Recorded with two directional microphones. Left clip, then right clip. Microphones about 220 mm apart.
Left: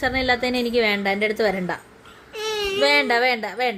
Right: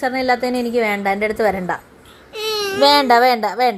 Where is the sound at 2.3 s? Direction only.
10° right (ahead or behind).